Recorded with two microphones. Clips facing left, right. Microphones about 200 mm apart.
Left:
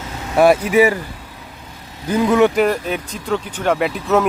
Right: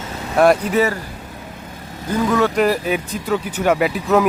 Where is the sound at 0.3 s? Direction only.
5° left (ahead or behind).